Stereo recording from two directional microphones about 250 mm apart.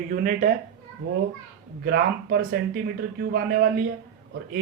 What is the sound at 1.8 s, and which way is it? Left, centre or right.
Speech, right.